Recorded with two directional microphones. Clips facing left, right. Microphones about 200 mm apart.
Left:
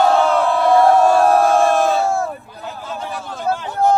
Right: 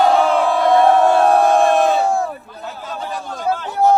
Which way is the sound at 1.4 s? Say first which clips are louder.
Right 1 dB; 15° right (ahead or behind).